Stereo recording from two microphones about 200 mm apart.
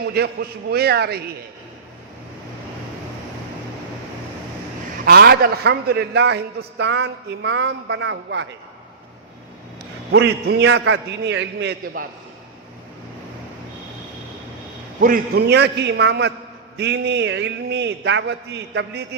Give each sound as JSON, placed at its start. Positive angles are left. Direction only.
{"t": 0.0, "sound": "a man's voice", "side_deg": -50}
{"t": 5.0, "sound": "a man's voice", "side_deg": -50}
{"t": 10.1, "sound": "a man's voice", "side_deg": -60}
{"t": 15.0, "sound": "a man's voice", "side_deg": -50}